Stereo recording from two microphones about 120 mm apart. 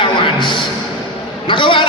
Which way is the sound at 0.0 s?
40° left (ahead or behind).